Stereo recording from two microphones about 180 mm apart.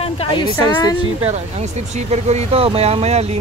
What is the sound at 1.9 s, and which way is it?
Speech, 35° right (ahead or behind).